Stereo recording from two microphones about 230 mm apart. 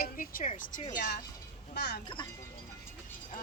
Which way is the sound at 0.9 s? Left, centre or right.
Left.